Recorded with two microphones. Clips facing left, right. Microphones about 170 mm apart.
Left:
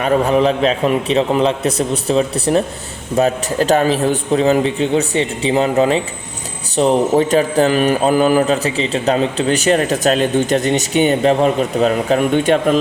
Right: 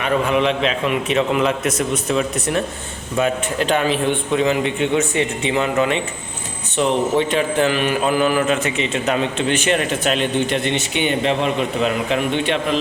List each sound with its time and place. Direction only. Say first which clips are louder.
0.0 s speech: left 4 dB; 35° left (ahead or behind)